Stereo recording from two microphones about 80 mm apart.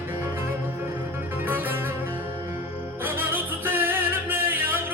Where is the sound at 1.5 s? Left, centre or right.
Right.